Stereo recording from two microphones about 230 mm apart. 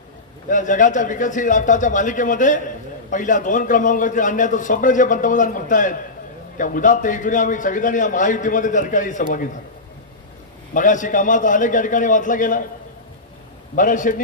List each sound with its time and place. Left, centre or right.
0.4 s a man's voice: left
10.8 s a man's voice: left
13.7 s a man's voice: left